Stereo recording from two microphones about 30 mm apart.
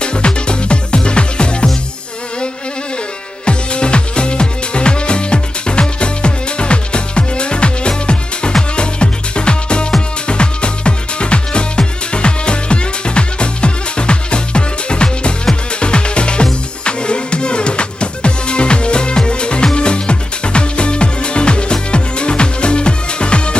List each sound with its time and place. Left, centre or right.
0.0 s music: left
3.4 s music: left